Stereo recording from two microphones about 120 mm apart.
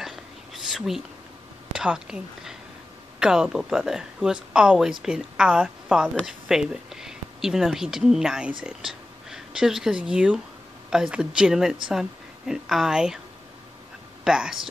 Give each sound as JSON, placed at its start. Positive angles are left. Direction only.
{"t": 0.7, "sound": "speech", "side_deg": -5}
{"t": 14.2, "sound": "speech", "side_deg": -5}